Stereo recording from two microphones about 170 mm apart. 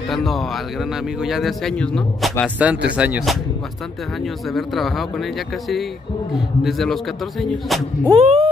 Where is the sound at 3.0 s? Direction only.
5° right (ahead or behind).